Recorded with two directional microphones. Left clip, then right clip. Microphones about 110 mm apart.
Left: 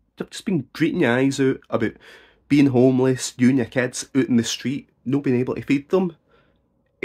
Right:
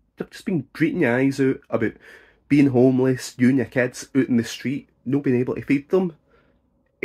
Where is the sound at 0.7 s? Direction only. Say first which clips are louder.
Left 1 dB; 20° left (ahead or behind).